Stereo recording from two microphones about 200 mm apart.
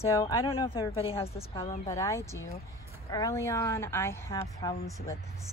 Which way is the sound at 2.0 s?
15° left (ahead or behind).